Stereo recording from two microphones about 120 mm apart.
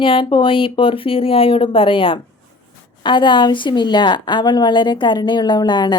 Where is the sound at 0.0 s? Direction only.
45° left (ahead or behind).